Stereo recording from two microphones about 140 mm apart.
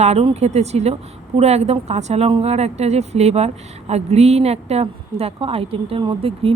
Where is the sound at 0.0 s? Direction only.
50° right (ahead or behind).